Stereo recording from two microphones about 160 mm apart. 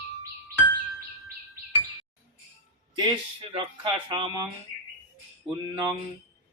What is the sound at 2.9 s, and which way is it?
Speech, 30° right (ahead or behind).